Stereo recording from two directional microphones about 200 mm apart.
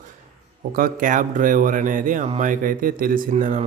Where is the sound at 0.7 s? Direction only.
45° right (ahead or behind).